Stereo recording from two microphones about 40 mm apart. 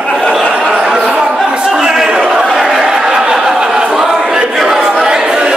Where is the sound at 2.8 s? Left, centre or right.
Right.